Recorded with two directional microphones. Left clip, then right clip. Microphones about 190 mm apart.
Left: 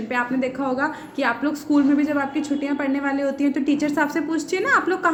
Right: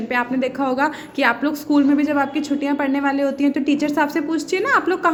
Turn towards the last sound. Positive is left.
turn(degrees=-15)  # may be behind; listen again after turning